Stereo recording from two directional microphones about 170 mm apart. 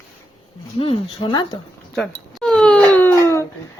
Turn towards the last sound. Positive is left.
turn(degrees=15)  # may be behind; listen again after turning